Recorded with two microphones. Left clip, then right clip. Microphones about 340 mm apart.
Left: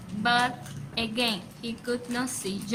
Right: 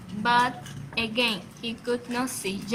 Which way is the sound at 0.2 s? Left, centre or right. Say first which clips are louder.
Right 2 dB; centre.